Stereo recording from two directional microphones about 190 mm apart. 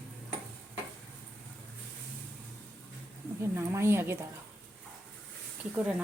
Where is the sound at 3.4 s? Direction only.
15° right (ahead or behind).